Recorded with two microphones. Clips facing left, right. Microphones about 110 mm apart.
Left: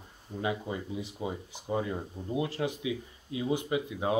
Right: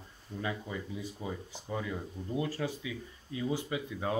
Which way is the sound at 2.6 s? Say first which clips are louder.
Left 4 dB; 20° left (ahead or behind).